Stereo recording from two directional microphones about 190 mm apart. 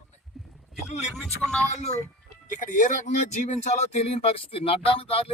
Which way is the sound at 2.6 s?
45° left (ahead or behind).